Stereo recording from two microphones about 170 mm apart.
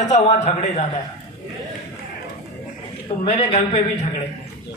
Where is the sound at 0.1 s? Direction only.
40° left (ahead or behind).